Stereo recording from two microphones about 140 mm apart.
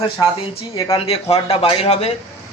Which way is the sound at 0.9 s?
45° left (ahead or behind).